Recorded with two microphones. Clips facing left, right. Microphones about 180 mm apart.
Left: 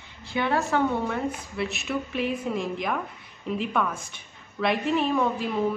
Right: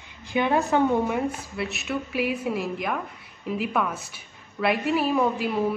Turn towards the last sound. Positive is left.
turn(degrees=-10)  # may be behind; listen again after turning